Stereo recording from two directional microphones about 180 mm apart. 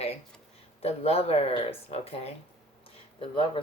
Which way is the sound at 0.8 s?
35° left (ahead or behind).